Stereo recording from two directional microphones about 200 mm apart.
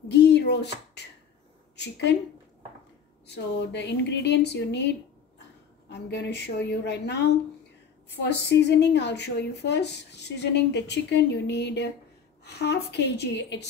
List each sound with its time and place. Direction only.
0.1 s a sound: 60° left (ahead or behind)
1.8 s speech: 60° left (ahead or behind)
3.3 s speech: 60° left (ahead or behind)